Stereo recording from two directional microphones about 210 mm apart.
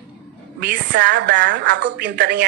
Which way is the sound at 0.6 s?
55° right (ahead or behind).